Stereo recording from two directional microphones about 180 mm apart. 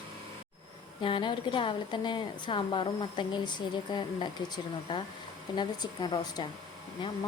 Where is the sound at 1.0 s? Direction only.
25° left (ahead or behind).